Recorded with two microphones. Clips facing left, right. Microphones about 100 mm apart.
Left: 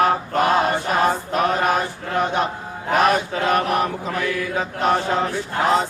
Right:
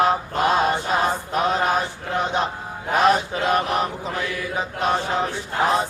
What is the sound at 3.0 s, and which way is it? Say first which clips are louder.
Mantra: even; 20° right (ahead or behind).